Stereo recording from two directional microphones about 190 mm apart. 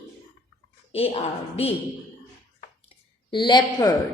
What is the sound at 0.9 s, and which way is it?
Speech, 30° left (ahead or behind).